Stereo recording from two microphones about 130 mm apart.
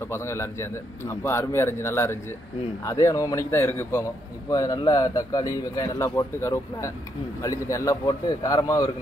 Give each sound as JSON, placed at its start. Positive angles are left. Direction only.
{"t": 0.0, "sound": "a man's voice", "side_deg": 20}